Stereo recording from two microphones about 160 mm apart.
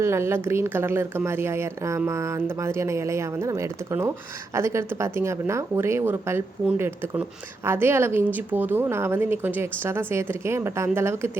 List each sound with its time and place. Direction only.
0.0 s a woman's voice: 15° right (ahead or behind)